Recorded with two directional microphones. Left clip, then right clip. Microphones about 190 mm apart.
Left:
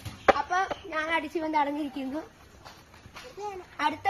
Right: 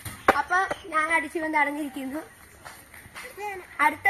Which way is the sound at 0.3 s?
50° right (ahead or behind).